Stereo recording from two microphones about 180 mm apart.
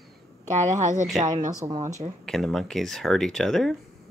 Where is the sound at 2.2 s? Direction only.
Centre (ahead or behind).